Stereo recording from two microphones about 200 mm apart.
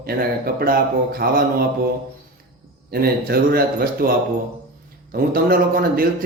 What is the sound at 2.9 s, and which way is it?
A man's voice, 50° right (ahead or behind).